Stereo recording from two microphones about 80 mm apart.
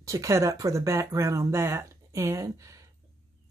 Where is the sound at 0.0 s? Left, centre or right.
Right.